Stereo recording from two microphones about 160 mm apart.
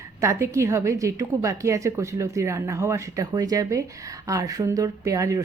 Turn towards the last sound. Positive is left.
turn(degrees=-20)  # may be behind; listen again after turning